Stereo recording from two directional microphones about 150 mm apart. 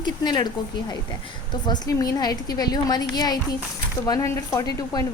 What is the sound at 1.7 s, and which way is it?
A woman's voice, 25° left (ahead or behind).